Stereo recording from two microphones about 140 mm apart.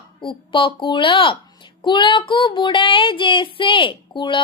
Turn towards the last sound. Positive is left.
turn(degrees=35)  # may be behind; listen again after turning